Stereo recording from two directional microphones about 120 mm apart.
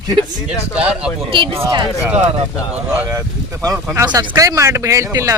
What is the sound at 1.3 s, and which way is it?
Speech, 45° right (ahead or behind).